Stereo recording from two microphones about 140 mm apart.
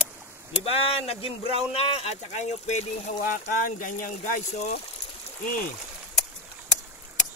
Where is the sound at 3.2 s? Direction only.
90° left; by 4.7 s 65° left (ahead or behind).